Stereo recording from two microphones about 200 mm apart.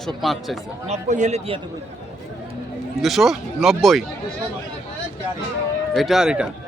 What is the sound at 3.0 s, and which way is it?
A man's voice, centre (ahead or behind).